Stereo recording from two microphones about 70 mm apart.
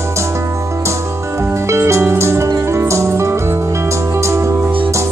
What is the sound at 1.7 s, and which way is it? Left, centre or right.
Music, right.